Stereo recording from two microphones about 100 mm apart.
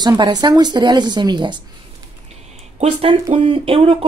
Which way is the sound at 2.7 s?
85° right.